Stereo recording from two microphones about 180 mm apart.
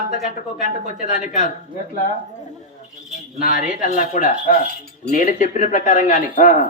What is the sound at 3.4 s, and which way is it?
A man's voice, 50° left (ahead or behind).